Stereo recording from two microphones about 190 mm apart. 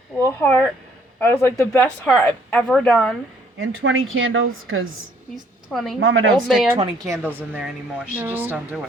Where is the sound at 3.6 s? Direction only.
90° right.